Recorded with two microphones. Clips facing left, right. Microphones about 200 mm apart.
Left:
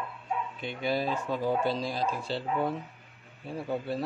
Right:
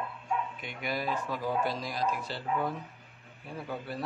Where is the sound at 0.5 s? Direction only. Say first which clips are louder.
Left 5 dB; 30° left (ahead or behind).